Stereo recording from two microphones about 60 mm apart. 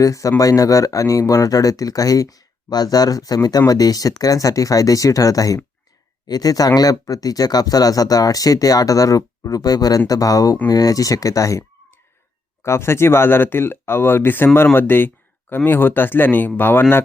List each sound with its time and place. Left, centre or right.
0.0 s speech: left
6.3 s speech: left
12.6 s speech: left